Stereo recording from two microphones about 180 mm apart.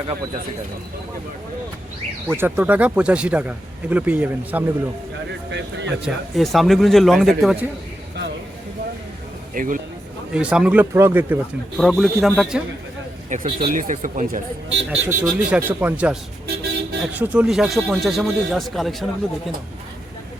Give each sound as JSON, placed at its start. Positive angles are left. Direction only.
{"t": 2.3, "sound": "speech", "side_deg": -10}
{"t": 5.5, "sound": "speech", "side_deg": -80}
{"t": 6.1, "sound": "speech", "side_deg": 0}
{"t": 9.6, "sound": "speech", "side_deg": -50}
{"t": 10.3, "sound": "speech", "side_deg": -5}
{"t": 11.8, "sound": "speech", "side_deg": 0}
{"t": 13.3, "sound": "speech", "side_deg": -30}
{"t": 13.7, "sound": "speech", "side_deg": -45}
{"t": 14.8, "sound": "speech", "side_deg": -5}